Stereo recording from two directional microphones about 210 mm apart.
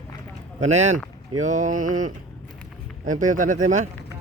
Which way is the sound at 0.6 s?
35° right (ahead or behind).